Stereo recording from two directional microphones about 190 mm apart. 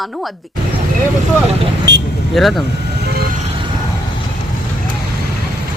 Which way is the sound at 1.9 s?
70° right (ahead or behind).